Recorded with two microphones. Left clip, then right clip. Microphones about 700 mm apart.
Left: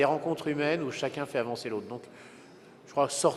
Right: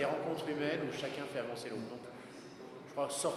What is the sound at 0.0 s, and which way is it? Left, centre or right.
A man's voice, left.